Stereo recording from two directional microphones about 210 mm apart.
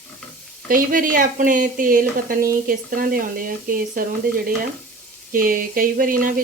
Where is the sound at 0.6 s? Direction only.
40° right (ahead or behind).